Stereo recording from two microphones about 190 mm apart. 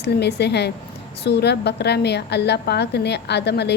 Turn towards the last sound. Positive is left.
turn(degrees=60)  # may be behind; listen again after turning